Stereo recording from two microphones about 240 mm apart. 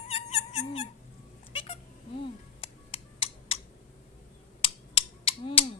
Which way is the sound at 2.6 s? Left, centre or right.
Left.